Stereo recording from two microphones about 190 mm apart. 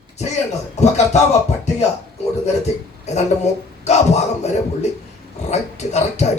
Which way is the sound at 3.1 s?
35° left (ahead or behind).